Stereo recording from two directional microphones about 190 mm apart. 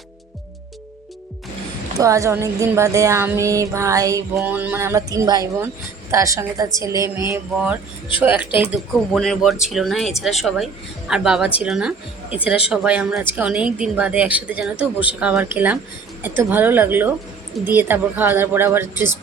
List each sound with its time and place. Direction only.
2.0 s music: 15° right (ahead or behind)
5.1 s speech: 20° right (ahead or behind)
6.1 s music: 15° right (ahead or behind)
9.1 s a woman's voice: centre (ahead or behind)
13.3 s music: 5° right (ahead or behind)